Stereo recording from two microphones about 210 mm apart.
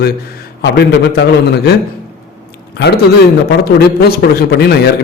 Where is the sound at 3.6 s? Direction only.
45° left (ahead or behind).